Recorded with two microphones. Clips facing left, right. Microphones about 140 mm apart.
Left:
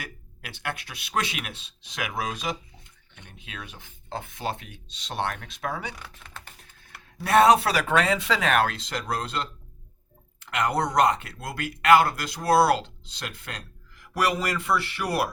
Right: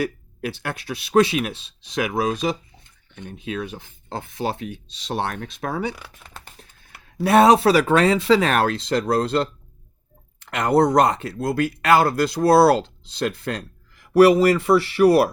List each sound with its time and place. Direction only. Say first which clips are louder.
0.0 s speech: right 16 dB; 35° right (ahead or behind)
7.2 s speech: right 4 dB; 30° right (ahead or behind)